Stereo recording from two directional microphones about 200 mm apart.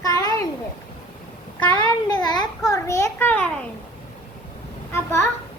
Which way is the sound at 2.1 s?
20° left (ahead or behind).